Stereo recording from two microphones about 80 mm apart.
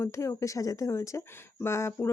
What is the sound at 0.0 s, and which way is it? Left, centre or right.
Speech, left.